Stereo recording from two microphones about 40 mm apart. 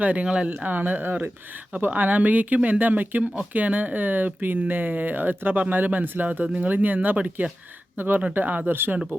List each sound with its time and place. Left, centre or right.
0.0 s speech: right
0.3 s speech: right
0.6 s speech: right
8.7 s speech: right